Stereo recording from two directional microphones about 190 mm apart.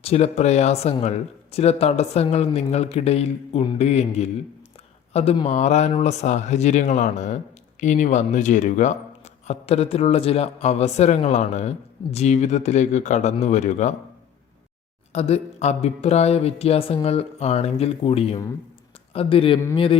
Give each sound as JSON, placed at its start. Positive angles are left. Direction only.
{"t": 0.0, "sound": "speech", "side_deg": 35}
{"t": 15.1, "sound": "speech", "side_deg": 35}